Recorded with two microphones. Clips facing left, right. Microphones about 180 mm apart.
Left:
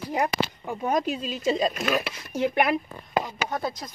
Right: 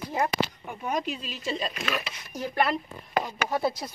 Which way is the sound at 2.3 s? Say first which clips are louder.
Left 8 dB; 30° left (ahead or behind).